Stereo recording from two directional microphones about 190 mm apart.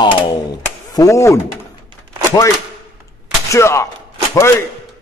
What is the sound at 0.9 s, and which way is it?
Speech, 15° left (ahead or behind).